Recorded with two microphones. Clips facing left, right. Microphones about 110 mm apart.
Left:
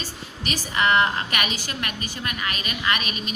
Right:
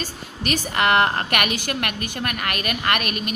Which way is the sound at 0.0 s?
60° right (ahead or behind).